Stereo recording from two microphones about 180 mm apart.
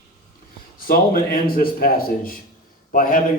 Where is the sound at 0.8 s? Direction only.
55° left (ahead or behind).